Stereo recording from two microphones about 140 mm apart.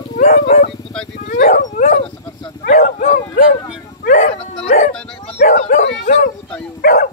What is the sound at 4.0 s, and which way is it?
Bow-wow, 75° left (ahead or behind).